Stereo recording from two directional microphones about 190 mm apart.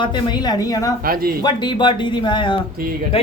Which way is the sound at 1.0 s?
50° right (ahead or behind).